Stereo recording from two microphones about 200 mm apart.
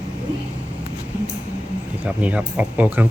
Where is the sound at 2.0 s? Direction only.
5° right (ahead or behind).